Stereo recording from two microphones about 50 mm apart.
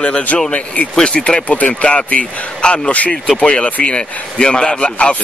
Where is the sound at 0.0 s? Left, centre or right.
Left.